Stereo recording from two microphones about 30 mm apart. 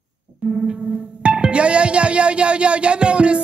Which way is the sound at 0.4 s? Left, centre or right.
Right.